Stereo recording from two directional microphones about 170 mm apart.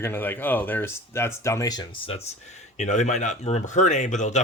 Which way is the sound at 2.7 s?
45° left (ahead or behind).